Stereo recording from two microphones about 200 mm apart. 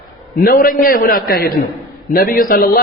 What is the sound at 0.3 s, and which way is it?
A man's voice, 45° left (ahead or behind).